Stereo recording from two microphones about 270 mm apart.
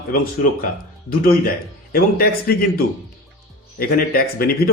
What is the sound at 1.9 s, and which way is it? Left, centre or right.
Speech, left.